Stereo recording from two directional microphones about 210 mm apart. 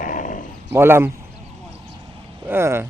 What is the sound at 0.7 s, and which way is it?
Speech, 10° right (ahead or behind).